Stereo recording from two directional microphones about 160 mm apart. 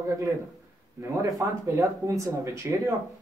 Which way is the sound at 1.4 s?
20° right (ahead or behind).